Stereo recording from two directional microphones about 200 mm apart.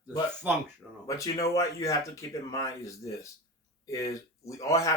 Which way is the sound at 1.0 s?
15° left (ahead or behind).